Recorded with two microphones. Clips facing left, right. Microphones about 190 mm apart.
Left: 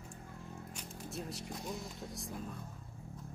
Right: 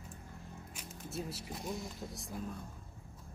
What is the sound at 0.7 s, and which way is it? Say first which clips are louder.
Speech: right 3 dB; 5° right (ahead or behind).